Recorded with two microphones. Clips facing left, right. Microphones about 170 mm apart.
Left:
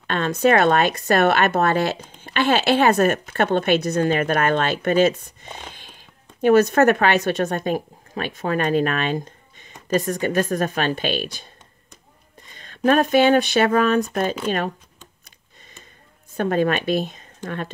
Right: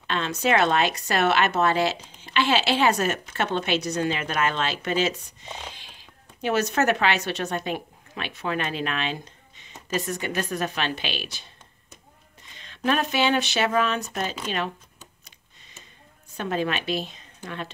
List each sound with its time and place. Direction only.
0.0 s speech: 50° left (ahead or behind)
12.5 s speech: 45° left (ahead or behind)
16.3 s speech: 50° left (ahead or behind)